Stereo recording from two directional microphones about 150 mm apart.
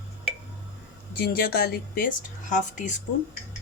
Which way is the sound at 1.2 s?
80° left.